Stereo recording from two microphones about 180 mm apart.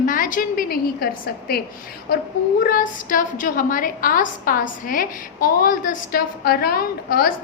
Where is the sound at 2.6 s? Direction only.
50° left (ahead or behind).